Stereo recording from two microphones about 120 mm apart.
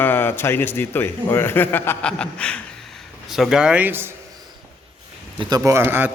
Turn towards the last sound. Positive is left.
turn(degrees=-15)  # may be behind; listen again after turning